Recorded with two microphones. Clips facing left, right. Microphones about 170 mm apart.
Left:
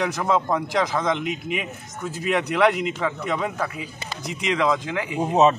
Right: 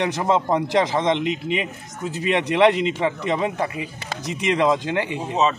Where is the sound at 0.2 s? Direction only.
30° right (ahead or behind).